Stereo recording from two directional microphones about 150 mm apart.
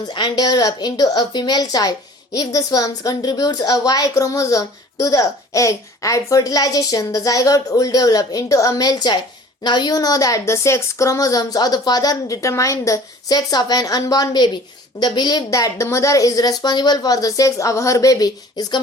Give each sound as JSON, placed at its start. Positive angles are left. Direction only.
{"t": 0.1, "sound": "a woman's voice", "side_deg": 25}